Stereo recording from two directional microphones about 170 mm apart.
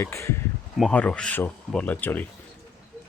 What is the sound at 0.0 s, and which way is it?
Speech, 15° left (ahead or behind).